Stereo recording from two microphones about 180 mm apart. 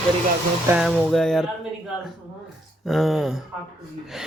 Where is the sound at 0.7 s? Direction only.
5° right (ahead or behind).